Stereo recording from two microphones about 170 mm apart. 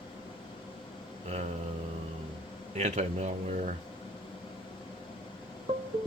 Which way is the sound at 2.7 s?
45° right (ahead or behind).